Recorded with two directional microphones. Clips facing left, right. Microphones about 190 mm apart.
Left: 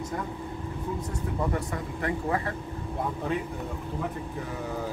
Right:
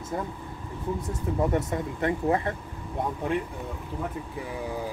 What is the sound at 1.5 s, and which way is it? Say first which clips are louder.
A man's voice: right 4 dB; 25° right (ahead or behind).